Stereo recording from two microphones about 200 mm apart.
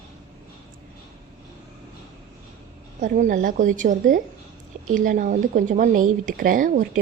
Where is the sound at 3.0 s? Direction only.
40° right (ahead or behind).